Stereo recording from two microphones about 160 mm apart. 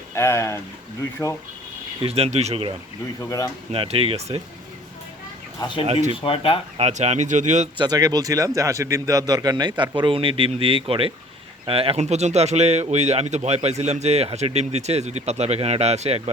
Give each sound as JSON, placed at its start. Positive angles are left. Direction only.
{"t": 0.1, "sound": "speech", "side_deg": 15}
{"t": 2.0, "sound": "speech", "side_deg": -40}
{"t": 3.2, "sound": "speech", "side_deg": 20}
{"t": 3.7, "sound": "speech", "side_deg": -35}
{"t": 5.5, "sound": "speech", "side_deg": 30}
{"t": 5.8, "sound": "speech", "side_deg": -45}
{"t": 6.1, "sound": "speech", "side_deg": 35}
{"t": 6.7, "sound": "speech", "side_deg": -40}
{"t": 7.8, "sound": "a man's voice", "side_deg": -25}